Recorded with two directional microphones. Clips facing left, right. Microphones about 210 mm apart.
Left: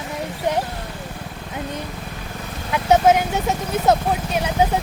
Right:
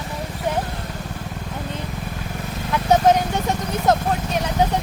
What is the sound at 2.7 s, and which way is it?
Vehicle, 5° left (ahead or behind).